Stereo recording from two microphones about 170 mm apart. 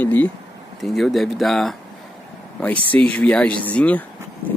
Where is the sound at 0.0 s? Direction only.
10° left (ahead or behind).